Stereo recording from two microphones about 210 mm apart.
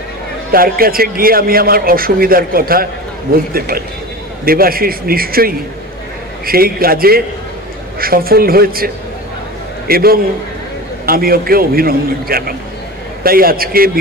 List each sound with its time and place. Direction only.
0.5 s a man's voice: 45° right (ahead or behind)